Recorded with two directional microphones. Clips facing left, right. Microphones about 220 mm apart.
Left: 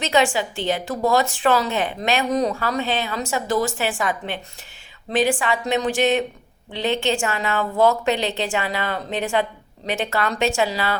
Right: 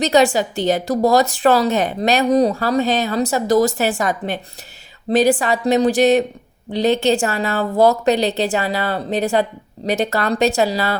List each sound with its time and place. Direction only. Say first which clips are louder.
0.0 s speech: right 5 dB; 40° right (ahead or behind)